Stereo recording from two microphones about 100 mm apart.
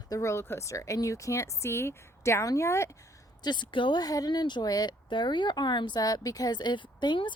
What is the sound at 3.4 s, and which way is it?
A woman's voice, 50° left (ahead or behind).